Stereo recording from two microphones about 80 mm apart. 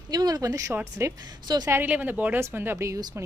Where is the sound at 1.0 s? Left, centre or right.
Right.